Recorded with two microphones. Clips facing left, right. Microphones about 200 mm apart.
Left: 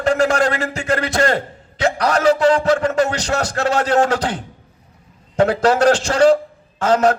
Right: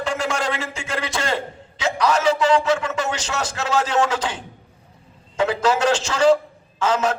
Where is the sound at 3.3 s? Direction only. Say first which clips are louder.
Left 1 dB; 55° left (ahead or behind).